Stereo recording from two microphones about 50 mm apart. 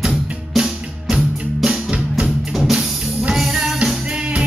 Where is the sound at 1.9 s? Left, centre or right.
Right.